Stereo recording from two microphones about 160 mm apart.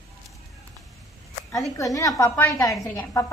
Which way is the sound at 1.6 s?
20° left (ahead or behind).